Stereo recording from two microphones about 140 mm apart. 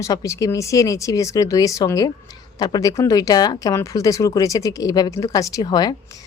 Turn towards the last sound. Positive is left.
turn(degrees=30)  # may be behind; listen again after turning